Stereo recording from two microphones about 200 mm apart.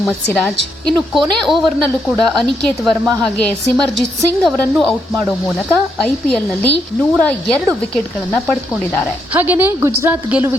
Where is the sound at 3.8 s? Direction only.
Centre (ahead or behind).